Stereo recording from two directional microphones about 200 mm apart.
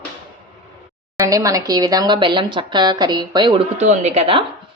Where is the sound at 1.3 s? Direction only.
15° right (ahead or behind).